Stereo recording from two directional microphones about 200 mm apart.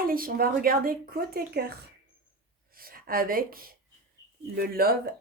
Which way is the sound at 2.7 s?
45° right (ahead or behind).